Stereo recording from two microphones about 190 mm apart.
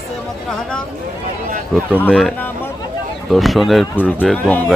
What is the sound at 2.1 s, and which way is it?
Speech, centre (ahead or behind).